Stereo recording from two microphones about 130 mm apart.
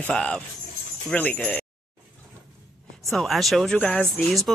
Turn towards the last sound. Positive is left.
turn(degrees=0)  # may be behind; listen again after turning